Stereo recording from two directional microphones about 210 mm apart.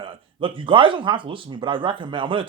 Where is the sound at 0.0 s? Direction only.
25° right (ahead or behind).